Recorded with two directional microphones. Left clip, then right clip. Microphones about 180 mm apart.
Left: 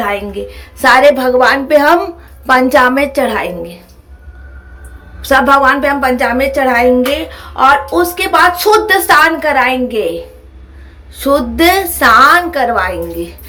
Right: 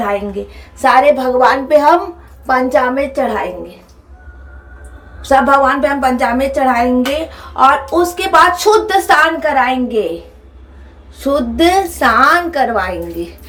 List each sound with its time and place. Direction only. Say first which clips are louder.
0.8 s a woman's voice: left 2 dB; 15° left (ahead or behind)
5.2 s a woman's voice: left 2 dB; 10° left (ahead or behind)